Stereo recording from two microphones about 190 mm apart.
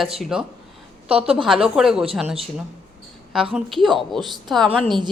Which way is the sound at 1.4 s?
Centre (ahead or behind).